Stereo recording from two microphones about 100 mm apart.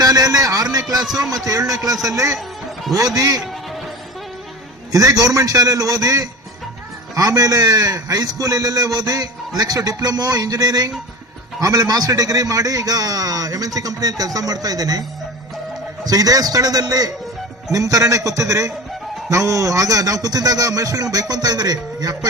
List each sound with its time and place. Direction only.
0.0 s a man's voice: 40° right (ahead or behind)
4.9 s a man's voice: 35° right (ahead or behind)
16.0 s a man's voice: 40° right (ahead or behind)